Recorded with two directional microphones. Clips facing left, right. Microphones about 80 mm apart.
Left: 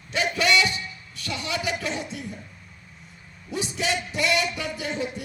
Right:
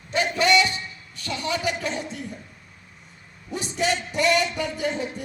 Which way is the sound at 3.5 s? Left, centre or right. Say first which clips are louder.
Right 2 dB; right.